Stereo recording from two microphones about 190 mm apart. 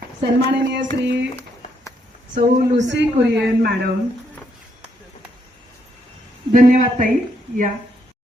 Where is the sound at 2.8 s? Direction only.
70° right (ahead or behind).